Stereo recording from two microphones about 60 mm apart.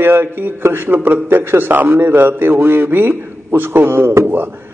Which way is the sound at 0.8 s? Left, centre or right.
Right.